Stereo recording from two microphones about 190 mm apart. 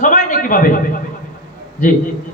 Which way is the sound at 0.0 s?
45° left (ahead or behind).